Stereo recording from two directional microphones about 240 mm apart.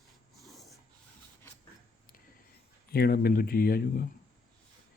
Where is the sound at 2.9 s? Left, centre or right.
Left.